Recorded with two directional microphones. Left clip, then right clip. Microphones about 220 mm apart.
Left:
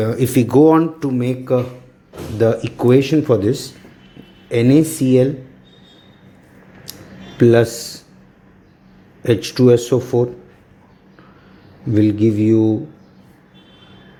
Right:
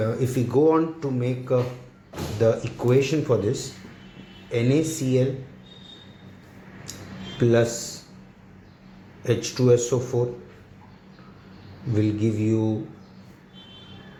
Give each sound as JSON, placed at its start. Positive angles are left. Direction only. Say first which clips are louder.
{"t": 0.0, "sound": "speech", "louder": "left 8 dB", "side_deg": 40}
{"t": 7.3, "sound": "speech", "louder": "left 8 dB", "side_deg": 40}
{"t": 9.2, "sound": "speech", "louder": "left 8 dB", "side_deg": 40}
{"t": 11.9, "sound": "speech", "louder": "left 10 dB", "side_deg": 35}